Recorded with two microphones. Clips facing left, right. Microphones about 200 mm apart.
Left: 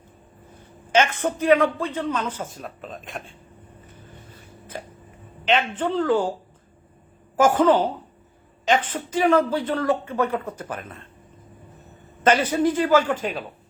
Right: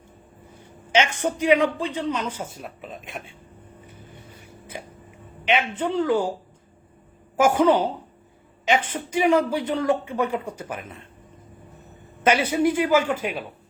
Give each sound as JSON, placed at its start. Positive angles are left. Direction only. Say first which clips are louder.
{"t": 0.9, "sound": "a woman's voice", "louder": "left 2 dB", "side_deg": 55}
{"t": 1.2, "sound": "speech", "louder": "even", "side_deg": -15}
{"t": 5.5, "sound": "speech", "louder": "left 1 dB", "side_deg": -10}
{"t": 7.3, "sound": "a woman's voice", "louder": "left 1 dB", "side_deg": -10}
{"t": 12.2, "sound": "speech", "louder": "left 1 dB", "side_deg": -10}